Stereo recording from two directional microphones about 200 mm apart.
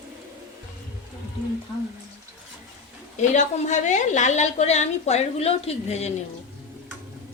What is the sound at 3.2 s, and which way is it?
A woman's voice, 35° left (ahead or behind).